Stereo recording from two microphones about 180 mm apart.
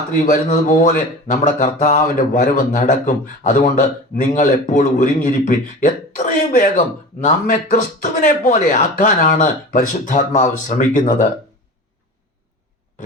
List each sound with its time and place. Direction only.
0.1 s speech: 45° left (ahead or behind)